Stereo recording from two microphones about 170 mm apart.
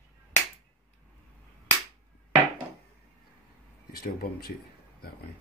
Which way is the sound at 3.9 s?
60° left (ahead or behind).